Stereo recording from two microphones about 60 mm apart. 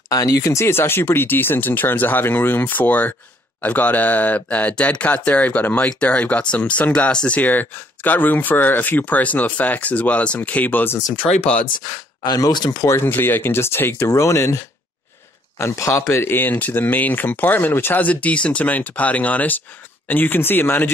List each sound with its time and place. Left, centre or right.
0.1 s speech: left; by 7.3 s centre
7.3 s speech: left
11.2 s speech: centre
12.4 s speech: left
12.9 s speech: left
14.1 s speech: left
15.5 s speech: left